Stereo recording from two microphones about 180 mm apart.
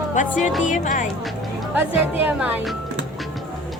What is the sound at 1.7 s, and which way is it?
Speech, 10° right (ahead or behind).